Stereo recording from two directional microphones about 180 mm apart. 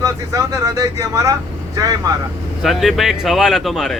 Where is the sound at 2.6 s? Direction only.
Centre (ahead or behind).